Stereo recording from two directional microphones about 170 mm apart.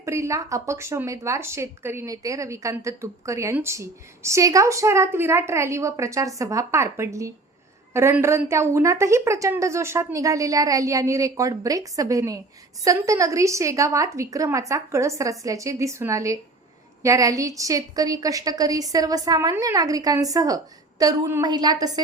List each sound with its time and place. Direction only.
0.0 s a woman's voice: 15° right (ahead or behind)